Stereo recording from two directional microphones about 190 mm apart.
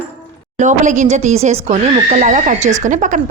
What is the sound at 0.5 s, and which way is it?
Speech, 40° right (ahead or behind).